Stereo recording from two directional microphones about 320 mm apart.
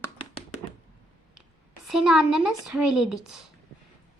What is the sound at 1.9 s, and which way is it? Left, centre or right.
A woman's voice, centre.